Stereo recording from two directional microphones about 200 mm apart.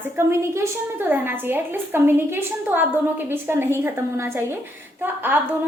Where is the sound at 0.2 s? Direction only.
15° right (ahead or behind).